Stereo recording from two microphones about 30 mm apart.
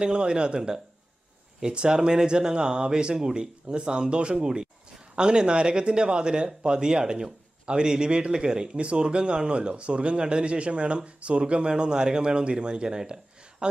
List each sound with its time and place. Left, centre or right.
0.0 s speech: right
8.7 s speech: right